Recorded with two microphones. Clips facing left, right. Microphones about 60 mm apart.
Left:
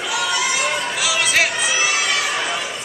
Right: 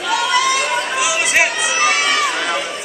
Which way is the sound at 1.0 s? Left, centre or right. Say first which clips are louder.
Right 2 dB; right.